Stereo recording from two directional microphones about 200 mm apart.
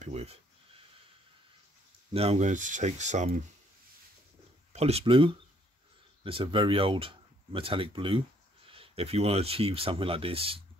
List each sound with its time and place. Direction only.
0.0 s speech: 35° right (ahead or behind)
2.1 s speech: 30° right (ahead or behind)
4.7 s speech: 30° right (ahead or behind)